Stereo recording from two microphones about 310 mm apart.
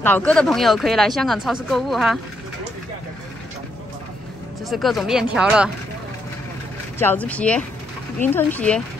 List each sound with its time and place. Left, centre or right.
0.0 s speech: centre
4.6 s speech: centre
7.0 s speech: centre